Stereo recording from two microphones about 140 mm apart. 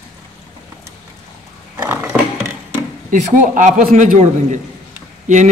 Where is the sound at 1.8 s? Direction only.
15° right (ahead or behind).